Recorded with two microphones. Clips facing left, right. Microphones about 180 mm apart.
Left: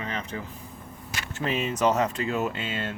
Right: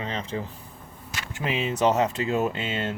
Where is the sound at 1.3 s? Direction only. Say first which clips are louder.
Even; 15° right (ahead or behind).